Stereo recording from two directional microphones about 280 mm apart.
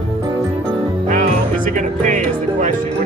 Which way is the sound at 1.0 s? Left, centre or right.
Right.